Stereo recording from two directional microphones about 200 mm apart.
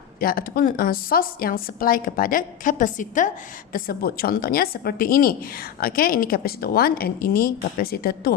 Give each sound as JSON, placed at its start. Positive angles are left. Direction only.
{"t": 0.2, "sound": "a woman's voice", "side_deg": 45}